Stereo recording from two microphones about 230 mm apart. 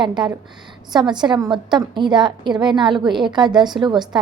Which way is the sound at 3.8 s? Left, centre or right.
Centre.